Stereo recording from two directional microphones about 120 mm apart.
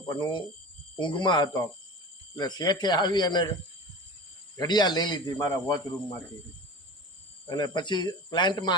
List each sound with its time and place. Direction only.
0.1 s speech: 35° left (ahead or behind)
4.5 s speech: 35° left (ahead or behind)
7.5 s speech: 35° left (ahead or behind)